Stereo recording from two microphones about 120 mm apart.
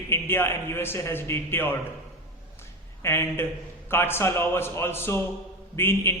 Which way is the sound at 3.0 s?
20° left (ahead or behind).